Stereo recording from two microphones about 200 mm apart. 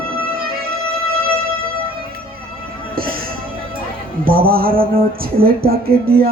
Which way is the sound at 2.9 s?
45° right (ahead or behind).